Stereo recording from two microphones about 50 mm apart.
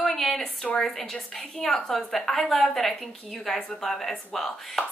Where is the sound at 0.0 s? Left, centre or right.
Centre.